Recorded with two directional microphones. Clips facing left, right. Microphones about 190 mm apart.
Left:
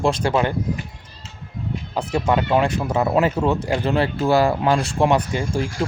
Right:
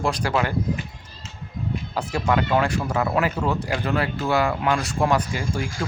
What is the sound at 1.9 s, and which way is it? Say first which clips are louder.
Speech: left 3 dB; 20° left (ahead or behind).